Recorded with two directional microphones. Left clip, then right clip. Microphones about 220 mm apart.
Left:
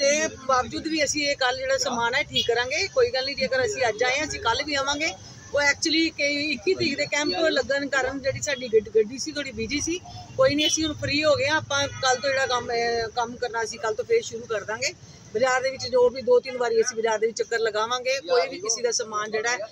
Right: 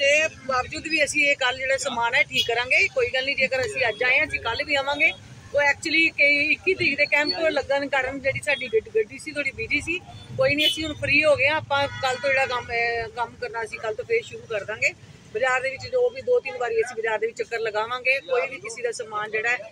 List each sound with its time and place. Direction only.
0.0 s speech: 15° left (ahead or behind)